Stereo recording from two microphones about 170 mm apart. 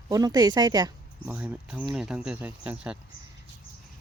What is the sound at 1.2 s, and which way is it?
Speech, 10° right (ahead or behind).